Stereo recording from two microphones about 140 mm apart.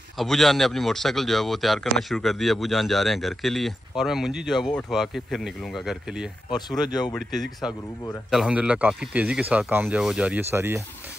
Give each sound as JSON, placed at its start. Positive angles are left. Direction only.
{"t": 0.2, "sound": "speech", "side_deg": 0}
{"t": 6.5, "sound": "speech", "side_deg": 30}
{"t": 7.6, "sound": "speech", "side_deg": -5}